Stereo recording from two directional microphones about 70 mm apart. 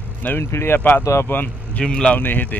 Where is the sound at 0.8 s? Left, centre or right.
Left.